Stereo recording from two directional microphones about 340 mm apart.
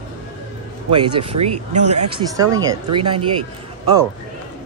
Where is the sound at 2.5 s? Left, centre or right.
Centre.